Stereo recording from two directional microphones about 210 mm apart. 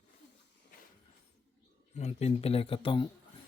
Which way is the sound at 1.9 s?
30° left (ahead or behind).